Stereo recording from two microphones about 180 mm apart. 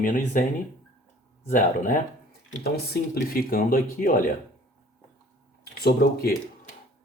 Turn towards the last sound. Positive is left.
turn(degrees=55)  # may be behind; listen again after turning